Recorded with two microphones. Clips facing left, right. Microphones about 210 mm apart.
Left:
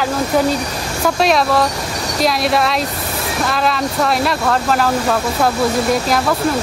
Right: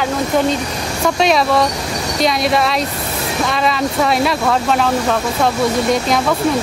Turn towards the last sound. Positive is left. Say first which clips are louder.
# right 1 dB
turn(degrees=0)  # may be behind; listen again after turning